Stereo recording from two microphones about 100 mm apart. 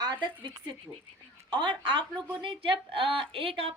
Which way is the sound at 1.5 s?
50° right (ahead or behind).